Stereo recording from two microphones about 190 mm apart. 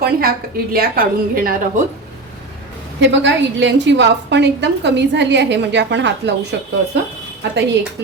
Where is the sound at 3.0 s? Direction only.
70° right (ahead or behind).